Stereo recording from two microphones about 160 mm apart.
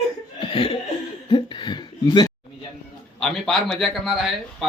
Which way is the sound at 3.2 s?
Centre (ahead or behind).